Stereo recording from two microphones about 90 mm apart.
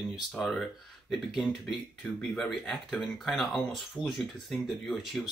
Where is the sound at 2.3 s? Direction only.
5° left (ahead or behind).